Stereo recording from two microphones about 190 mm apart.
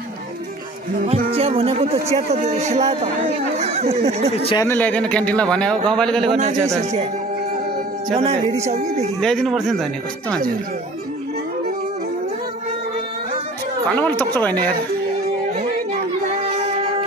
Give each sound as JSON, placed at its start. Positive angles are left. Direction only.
{"t": 1.0, "sound": "speech", "side_deg": -30}
{"t": 4.6, "sound": "a man's voice", "side_deg": 10}
{"t": 6.8, "sound": "speech", "side_deg": -35}
{"t": 8.1, "sound": "a man's voice", "side_deg": -30}
{"t": 9.2, "sound": "a man's voice", "side_deg": 0}
{"t": 13.8, "sound": "speech", "side_deg": 5}